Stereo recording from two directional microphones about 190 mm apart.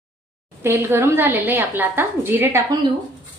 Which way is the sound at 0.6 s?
15° right (ahead or behind).